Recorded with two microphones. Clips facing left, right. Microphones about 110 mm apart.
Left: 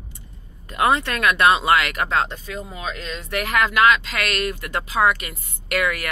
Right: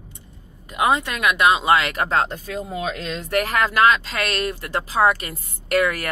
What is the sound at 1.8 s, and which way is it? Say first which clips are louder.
Speech: right 1 dB; 30° right (ahead or behind).